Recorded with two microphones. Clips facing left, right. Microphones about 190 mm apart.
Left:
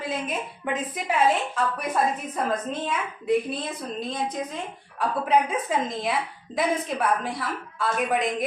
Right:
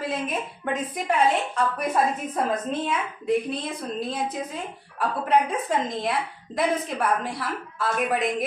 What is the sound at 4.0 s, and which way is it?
A woman's voice, 5° right (ahead or behind).